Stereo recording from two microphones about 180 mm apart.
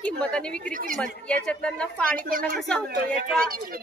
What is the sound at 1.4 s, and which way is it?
Speech, 5° left (ahead or behind).